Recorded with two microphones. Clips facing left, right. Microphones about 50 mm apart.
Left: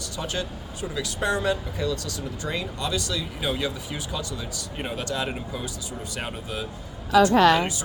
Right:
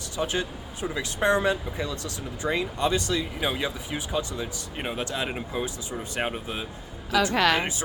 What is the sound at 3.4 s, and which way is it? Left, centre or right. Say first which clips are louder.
Speech: even; centre.